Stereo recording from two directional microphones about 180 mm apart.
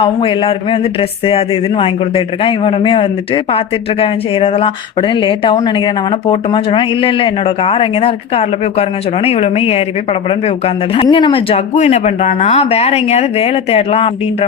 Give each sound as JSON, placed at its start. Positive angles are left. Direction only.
{"t": 0.0, "sound": "speech", "side_deg": 30}
{"t": 10.9, "sound": "speech", "side_deg": 30}